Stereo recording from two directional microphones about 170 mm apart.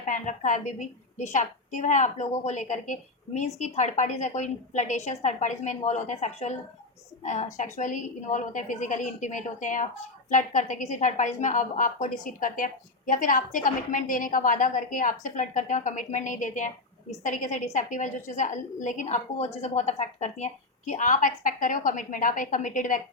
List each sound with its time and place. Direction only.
0.0 s a woman's voice: 50° left (ahead or behind)